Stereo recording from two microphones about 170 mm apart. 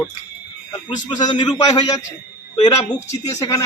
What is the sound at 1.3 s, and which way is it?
A woman's voice, 25° left (ahead or behind).